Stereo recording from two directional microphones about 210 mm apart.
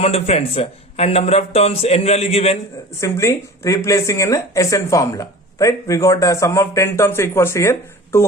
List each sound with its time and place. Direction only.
0.0 s a man's voice: 30° left (ahead or behind)
3.0 s speech: 15° left (ahead or behind)